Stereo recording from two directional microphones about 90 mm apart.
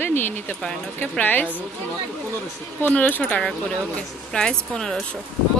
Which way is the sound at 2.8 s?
20° left (ahead or behind).